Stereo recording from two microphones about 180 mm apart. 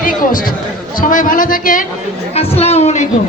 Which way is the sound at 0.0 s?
50° left (ahead or behind).